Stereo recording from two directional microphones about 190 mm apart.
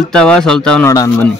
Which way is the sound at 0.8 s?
15° left (ahead or behind).